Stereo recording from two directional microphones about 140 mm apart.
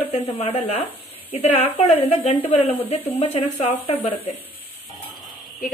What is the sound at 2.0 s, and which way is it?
A woman's voice, 50° left (ahead or behind).